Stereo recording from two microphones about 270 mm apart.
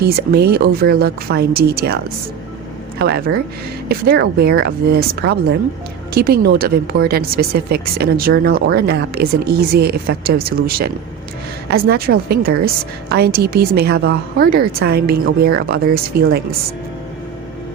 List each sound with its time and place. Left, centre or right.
0.0 s speech: right
3.0 s speech: right